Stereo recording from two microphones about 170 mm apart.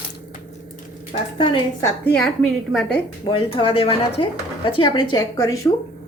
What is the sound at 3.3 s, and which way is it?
Speech, 35° left (ahead or behind).